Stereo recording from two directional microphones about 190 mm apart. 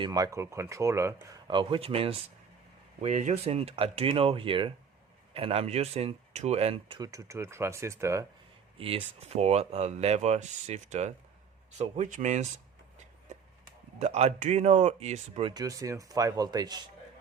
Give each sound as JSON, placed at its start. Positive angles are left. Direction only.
{"t": 0.0, "sound": "speech", "side_deg": -20}
{"t": 8.8, "sound": "speech", "side_deg": -30}
{"t": 14.0, "sound": "speech", "side_deg": -35}